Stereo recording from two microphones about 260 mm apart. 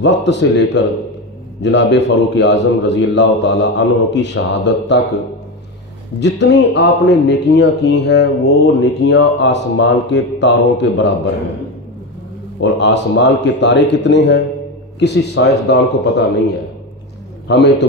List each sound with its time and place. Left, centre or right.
0.0 s a man's voice: left
6.1 s speech: left
12.5 s a man's voice: left
17.5 s speech: left